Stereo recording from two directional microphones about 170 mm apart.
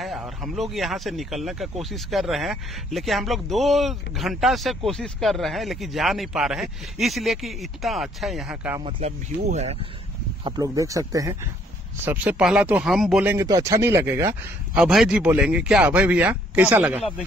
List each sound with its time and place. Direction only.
0.0 s speech: centre (ahead or behind)
8.8 s speech: 40° right (ahead or behind)
10.4 s speech: 20° right (ahead or behind)